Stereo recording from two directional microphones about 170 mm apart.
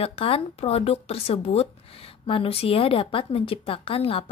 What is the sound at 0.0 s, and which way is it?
A woman's voice, 35° left (ahead or behind).